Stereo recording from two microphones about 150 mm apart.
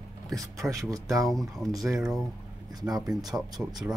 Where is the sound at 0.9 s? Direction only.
20° right (ahead or behind).